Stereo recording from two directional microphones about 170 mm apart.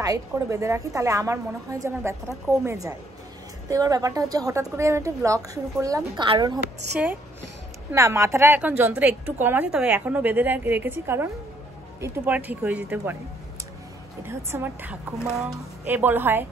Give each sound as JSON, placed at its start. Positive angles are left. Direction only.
{"t": 0.0, "sound": "a woman's voice", "side_deg": -20}
{"t": 7.9, "sound": "a woman's voice", "side_deg": -15}
{"t": 14.2, "sound": "a woman's voice", "side_deg": -15}